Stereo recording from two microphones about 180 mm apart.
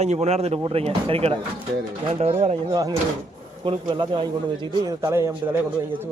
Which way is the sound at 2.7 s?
20° right (ahead or behind).